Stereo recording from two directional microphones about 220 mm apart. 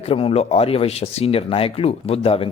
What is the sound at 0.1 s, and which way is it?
Speech, 25° left (ahead or behind).